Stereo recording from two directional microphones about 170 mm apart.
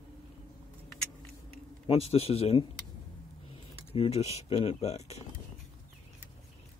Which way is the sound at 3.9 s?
35° left (ahead or behind).